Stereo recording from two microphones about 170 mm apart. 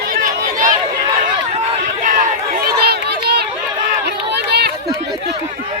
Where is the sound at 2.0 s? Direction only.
50° right (ahead or behind); by 3.4 s 70° right (ahead or behind).